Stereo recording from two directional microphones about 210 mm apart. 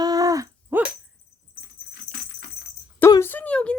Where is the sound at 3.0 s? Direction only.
10° left (ahead or behind).